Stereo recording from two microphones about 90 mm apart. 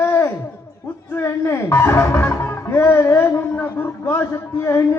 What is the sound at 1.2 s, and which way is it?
A man's voice, 30° left (ahead or behind).